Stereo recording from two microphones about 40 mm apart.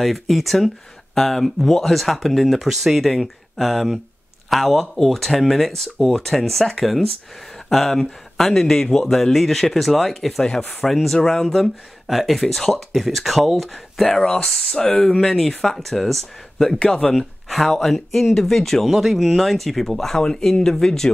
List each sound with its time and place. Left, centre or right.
0.0 s speech: centre
16.7 s speech: left
17.5 s speech: centre
18.9 s speech: centre